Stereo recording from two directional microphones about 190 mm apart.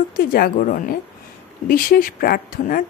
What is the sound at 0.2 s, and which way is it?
Speech, 50° left (ahead or behind).